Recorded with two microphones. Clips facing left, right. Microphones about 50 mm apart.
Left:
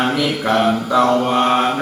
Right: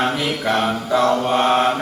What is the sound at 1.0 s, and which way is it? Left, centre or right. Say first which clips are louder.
Mantra: left 3 dB; centre.